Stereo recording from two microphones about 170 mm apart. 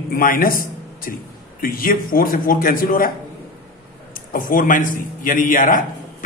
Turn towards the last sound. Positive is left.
turn(degrees=50)  # may be behind; listen again after turning